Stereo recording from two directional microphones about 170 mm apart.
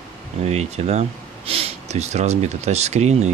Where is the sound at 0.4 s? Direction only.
40° right (ahead or behind).